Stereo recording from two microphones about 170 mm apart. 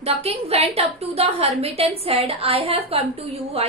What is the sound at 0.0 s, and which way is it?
A woman's voice, 35° right (ahead or behind).